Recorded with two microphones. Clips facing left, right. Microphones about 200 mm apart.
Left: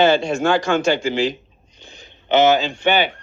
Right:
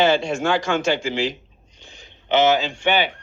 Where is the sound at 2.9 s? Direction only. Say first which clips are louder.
Left 2 dB; 50° left (ahead or behind).